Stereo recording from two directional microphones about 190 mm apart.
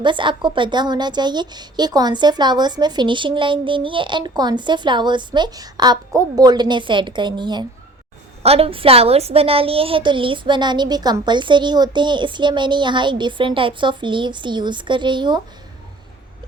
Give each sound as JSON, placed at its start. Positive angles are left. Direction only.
{"t": 0.0, "sound": "a woman's voice", "side_deg": -25}